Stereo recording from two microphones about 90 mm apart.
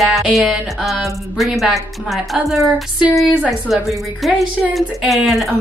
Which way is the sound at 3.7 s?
Centre (ahead or behind).